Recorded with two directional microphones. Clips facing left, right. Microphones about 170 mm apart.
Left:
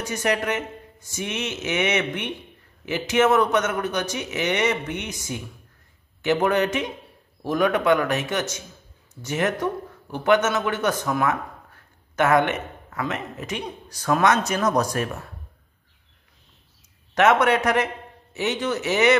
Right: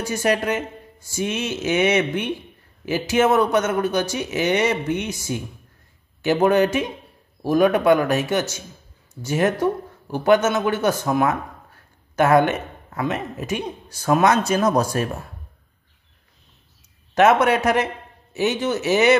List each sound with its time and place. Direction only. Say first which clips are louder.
0.0 s a man's voice: right 3 dB; 30° right (ahead or behind)
17.1 s a man's voice: right 2 dB; 30° right (ahead or behind)